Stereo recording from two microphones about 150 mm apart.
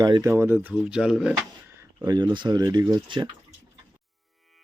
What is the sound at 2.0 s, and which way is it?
Speech, 25° right (ahead or behind).